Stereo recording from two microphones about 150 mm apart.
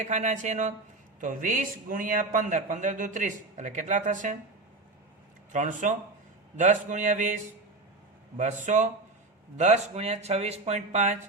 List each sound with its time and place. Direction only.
0.0 s a man's voice: 50° right (ahead or behind)
5.5 s a man's voice: 55° right (ahead or behind)